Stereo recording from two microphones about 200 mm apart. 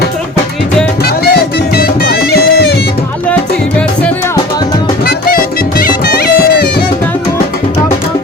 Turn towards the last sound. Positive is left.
turn(degrees=50)  # may be behind; listen again after turning